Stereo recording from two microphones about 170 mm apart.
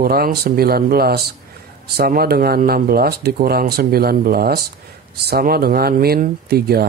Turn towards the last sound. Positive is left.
turn(degrees=-65)  # may be behind; listen again after turning